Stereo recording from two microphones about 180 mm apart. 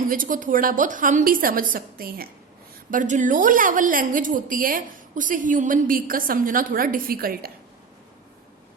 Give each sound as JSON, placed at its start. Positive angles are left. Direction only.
{"t": 0.1, "sound": "a woman's voice", "side_deg": -50}
{"t": 2.9, "sound": "a woman's voice", "side_deg": -45}